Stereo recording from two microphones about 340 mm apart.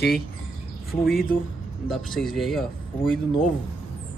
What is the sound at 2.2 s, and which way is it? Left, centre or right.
Speech, centre.